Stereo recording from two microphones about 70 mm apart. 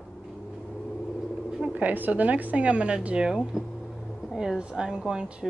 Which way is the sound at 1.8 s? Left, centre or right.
Right.